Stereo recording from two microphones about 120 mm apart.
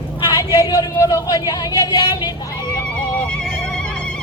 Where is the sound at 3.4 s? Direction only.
10° left (ahead or behind).